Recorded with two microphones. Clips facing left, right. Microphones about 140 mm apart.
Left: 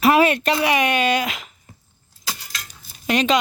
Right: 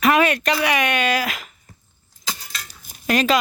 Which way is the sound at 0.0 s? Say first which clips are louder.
Left 2 dB; 30° left (ahead or behind).